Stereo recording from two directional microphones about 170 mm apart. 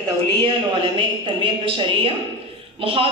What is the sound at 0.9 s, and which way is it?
Speech, 30° right (ahead or behind).